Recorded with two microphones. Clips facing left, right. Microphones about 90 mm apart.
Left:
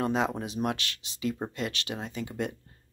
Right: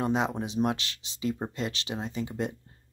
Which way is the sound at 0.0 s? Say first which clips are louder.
Even; 20° right (ahead or behind).